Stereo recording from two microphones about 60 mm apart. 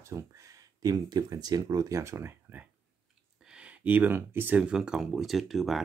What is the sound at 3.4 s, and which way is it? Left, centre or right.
Speech, centre.